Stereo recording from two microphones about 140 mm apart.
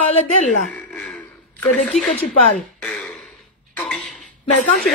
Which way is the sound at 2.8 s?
5° left (ahead or behind).